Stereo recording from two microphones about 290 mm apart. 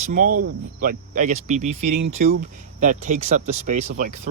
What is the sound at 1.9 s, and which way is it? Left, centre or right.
Speech, right.